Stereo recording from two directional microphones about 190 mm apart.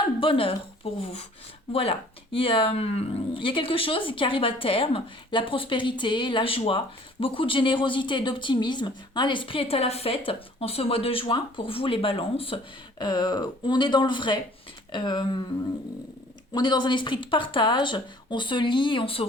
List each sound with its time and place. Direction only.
0.2 s speech: 30° left (ahead or behind)
1.7 s speech: 30° left (ahead or behind)
16.6 s speech: 25° left (ahead or behind)